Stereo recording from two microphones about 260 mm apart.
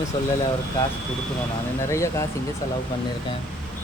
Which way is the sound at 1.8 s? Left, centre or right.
Centre.